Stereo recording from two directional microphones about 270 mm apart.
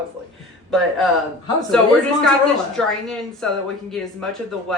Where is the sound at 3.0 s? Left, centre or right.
Centre.